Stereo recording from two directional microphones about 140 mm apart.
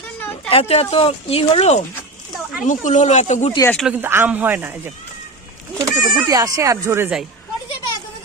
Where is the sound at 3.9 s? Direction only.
15° right (ahead or behind).